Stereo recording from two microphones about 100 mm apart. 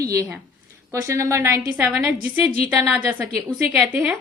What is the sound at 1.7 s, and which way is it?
A woman's voice, 10° right (ahead or behind).